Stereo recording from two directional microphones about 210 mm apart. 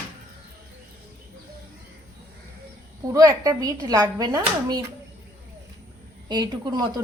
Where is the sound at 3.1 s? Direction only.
15° right (ahead or behind).